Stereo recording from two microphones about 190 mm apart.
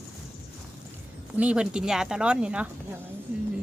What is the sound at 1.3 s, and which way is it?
A woman's voice, 5° right (ahead or behind).